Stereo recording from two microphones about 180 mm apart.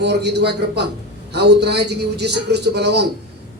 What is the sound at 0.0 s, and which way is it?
A man's voice, 70° right (ahead or behind).